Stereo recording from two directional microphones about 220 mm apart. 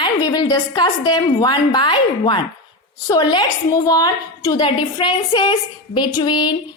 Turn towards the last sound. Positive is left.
turn(degrees=20)  # may be behind; listen again after turning